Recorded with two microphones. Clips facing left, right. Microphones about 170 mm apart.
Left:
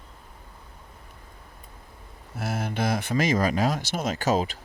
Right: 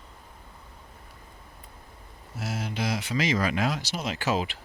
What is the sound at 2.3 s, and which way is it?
Speech, 55° left (ahead or behind).